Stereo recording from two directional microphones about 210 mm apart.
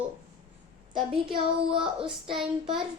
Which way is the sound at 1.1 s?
25° right (ahead or behind).